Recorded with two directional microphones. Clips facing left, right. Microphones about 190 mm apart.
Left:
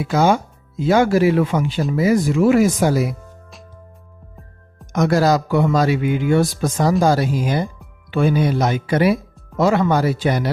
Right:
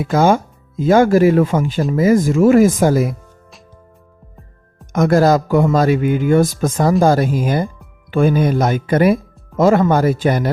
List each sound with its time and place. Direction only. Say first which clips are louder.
0.0 s speech: right 3 dB; 50° right (ahead or behind)
4.9 s speech: right 3 dB; 50° right (ahead or behind)